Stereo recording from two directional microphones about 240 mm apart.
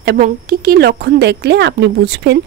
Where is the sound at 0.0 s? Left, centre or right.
Right.